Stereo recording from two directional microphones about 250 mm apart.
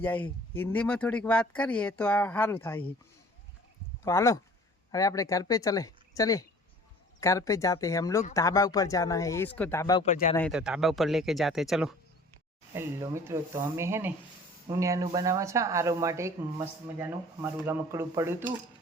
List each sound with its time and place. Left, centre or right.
0.0 s speech: centre
4.0 s speech: centre
10.0 s speech: left
10.3 s speech: centre